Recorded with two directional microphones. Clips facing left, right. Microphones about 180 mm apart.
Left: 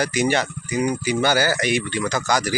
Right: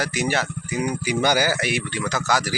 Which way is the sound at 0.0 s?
Centre (ahead or behind).